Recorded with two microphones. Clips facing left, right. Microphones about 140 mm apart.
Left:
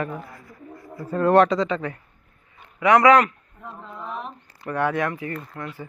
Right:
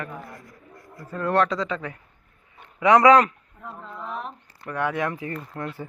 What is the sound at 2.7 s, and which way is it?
Speech, 20° right (ahead or behind).